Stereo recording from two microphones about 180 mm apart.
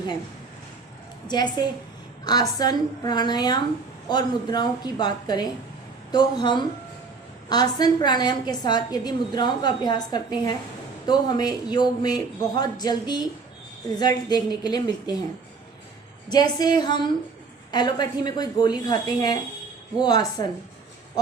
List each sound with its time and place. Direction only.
1.3 s a woman's voice: 25° left (ahead or behind)
16.3 s a woman's voice: 20° left (ahead or behind)